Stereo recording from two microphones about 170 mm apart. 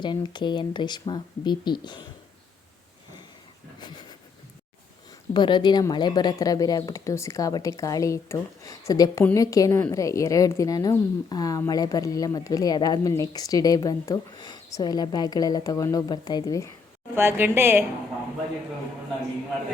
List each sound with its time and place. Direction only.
0.0 s a woman's voice: 25° left (ahead or behind)
3.8 s a sound: 25° left (ahead or behind)
5.3 s a woman's voice: 25° left (ahead or behind)
17.2 s a woman's voice: 15° right (ahead or behind)